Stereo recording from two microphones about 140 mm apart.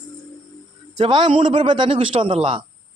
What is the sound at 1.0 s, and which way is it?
A man's voice, 50° right (ahead or behind).